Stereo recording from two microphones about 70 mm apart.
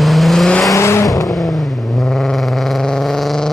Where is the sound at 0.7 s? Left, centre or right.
Left.